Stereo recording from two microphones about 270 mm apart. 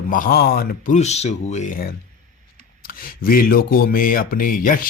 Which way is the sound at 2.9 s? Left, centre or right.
Left.